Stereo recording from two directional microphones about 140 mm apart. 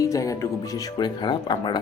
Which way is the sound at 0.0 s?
25° left (ahead or behind).